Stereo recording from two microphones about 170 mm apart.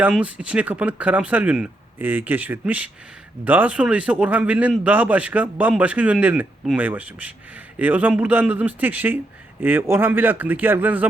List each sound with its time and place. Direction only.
0.1 s speech: 5° right (ahead or behind)